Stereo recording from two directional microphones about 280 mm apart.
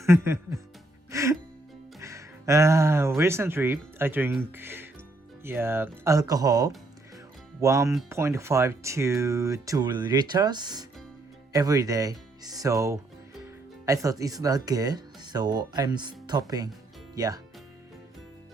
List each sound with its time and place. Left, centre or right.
0.0 s speech: centre
1.1 s music: centre
2.0 s speech: centre